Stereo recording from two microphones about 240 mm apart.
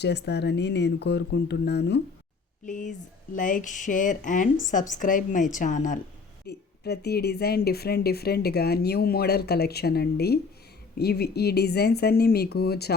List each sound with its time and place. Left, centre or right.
0.0 s speech: left
2.6 s speech: left
6.5 s speech: left